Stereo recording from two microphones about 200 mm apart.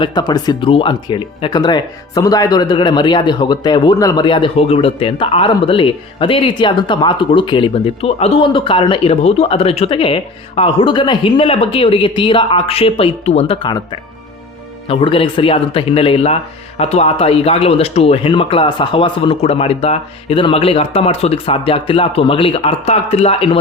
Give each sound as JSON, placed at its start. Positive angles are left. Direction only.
{"t": 0.0, "sound": "speech", "side_deg": 20}
{"t": 14.8, "sound": "speech", "side_deg": 25}